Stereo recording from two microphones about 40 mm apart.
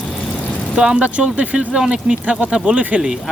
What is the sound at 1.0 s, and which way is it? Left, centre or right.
Speech, right.